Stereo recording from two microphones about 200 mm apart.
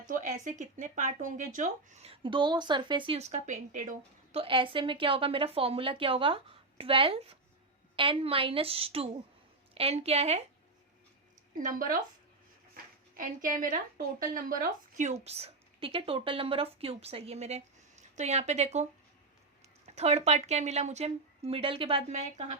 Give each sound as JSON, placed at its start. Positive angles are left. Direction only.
{"t": 0.1, "sound": "a sound", "side_deg": -40}
{"t": 0.4, "sound": "a woman's voice", "side_deg": -35}
{"t": 11.5, "sound": "a woman's voice", "side_deg": -40}